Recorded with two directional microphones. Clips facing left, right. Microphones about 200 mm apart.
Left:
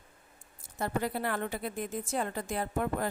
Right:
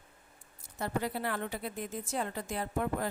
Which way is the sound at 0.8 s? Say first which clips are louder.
Left 2 dB; 50° left (ahead or behind).